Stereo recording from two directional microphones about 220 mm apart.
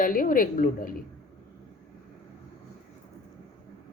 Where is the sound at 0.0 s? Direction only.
40° left (ahead or behind).